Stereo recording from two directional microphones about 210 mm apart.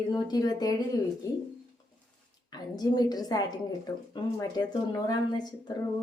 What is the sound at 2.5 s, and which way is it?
Speech, 20° left (ahead or behind).